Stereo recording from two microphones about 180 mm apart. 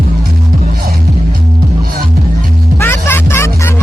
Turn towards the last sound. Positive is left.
turn(degrees=15)  # may be behind; listen again after turning